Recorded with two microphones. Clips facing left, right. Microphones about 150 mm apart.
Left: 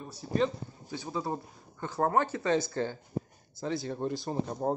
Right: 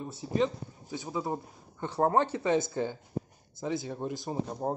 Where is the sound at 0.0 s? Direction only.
20° right (ahead or behind).